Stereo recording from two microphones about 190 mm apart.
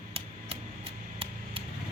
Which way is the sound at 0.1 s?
30° right (ahead or behind).